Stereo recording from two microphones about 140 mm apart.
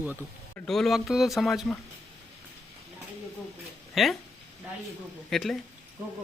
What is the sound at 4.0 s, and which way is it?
Speech, centre (ahead or behind).